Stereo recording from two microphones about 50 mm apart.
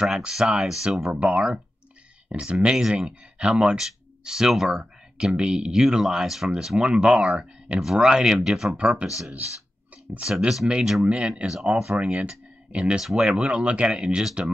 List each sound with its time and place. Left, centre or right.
0.0 s speech: centre
2.2 s speech: right
5.1 s speech: right
9.0 s speech: centre
11.1 s speech: right
12.3 s a sound: centre
13.0 s speech: centre
13.4 s speech: right